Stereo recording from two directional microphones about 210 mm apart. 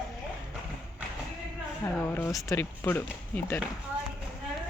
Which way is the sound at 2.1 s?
10° left (ahead or behind).